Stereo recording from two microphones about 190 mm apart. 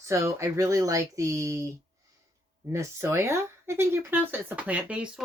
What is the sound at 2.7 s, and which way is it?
Speech, 15° right (ahead or behind).